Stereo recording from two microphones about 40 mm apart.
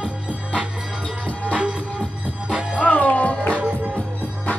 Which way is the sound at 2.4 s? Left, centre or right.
Right.